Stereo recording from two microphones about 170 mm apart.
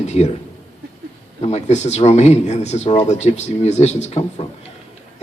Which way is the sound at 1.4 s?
40° left (ahead or behind).